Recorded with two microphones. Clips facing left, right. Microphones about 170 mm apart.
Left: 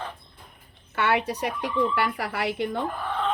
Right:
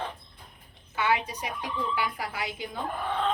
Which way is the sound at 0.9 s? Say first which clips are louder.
Left 3 dB; 70° left (ahead or behind).